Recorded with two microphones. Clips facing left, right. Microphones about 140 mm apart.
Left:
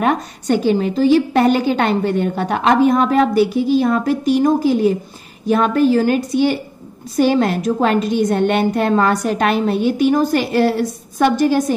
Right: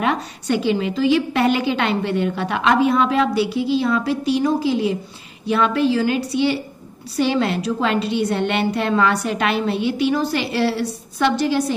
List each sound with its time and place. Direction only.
0.0 s a woman's voice: 45° left (ahead or behind)